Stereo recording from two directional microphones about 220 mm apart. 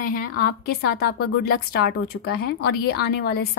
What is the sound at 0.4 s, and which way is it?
Speech, 45° left (ahead or behind).